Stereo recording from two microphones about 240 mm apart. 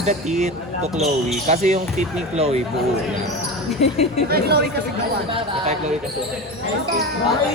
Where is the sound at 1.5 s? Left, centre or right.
Right.